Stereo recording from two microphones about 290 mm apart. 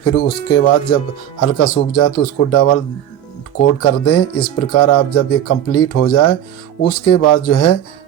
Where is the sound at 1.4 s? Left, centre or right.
Left.